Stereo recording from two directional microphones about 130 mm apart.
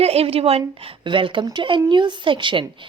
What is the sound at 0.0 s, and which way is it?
A woman's voice, 50° right (ahead or behind).